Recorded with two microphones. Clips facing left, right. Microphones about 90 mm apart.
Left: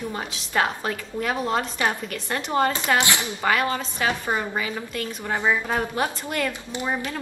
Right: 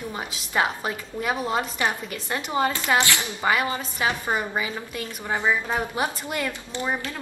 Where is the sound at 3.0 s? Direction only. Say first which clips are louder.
Even; 20° left (ahead or behind).